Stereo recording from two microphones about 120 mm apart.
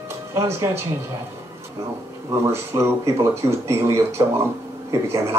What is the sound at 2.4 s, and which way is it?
Speech, 20° right (ahead or behind).